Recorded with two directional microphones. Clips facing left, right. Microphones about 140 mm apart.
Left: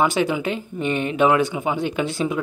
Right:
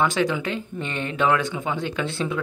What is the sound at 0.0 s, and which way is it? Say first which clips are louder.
Speech: left 2 dB; 15° left (ahead or behind).